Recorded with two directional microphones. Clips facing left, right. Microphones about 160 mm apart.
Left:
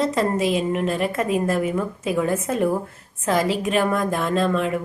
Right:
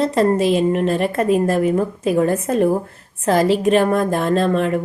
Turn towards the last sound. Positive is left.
turn(degrees=-35)  # may be behind; listen again after turning